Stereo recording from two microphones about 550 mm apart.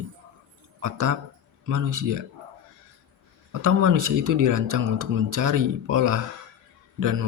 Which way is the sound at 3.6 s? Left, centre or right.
Right.